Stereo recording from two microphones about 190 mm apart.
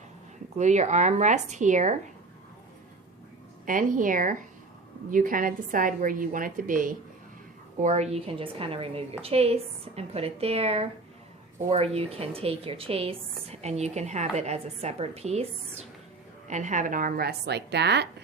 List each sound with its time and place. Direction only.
0.5 s a woman's voice: 40° right (ahead or behind)
3.7 s a woman's voice: 45° right (ahead or behind); by 18.1 s 60° right (ahead or behind)